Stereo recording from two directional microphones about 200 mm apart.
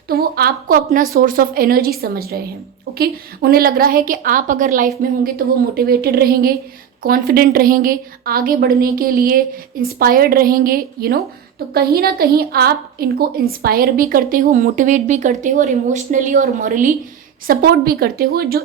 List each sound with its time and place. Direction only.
0.1 s a woman's voice: 50° right (ahead or behind)